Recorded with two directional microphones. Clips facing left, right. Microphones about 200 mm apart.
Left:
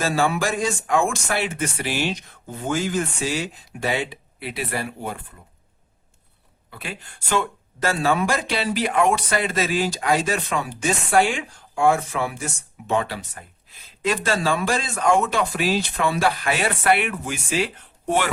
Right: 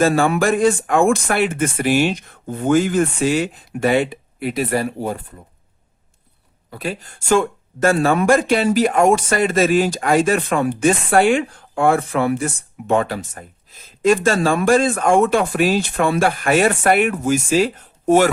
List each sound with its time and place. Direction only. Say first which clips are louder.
0.0 s speech: right 6 dB; 55° right (ahead or behind); by 5.2 s 40° right (ahead or behind)
6.7 s speech: right 9 dB; 40° right (ahead or behind)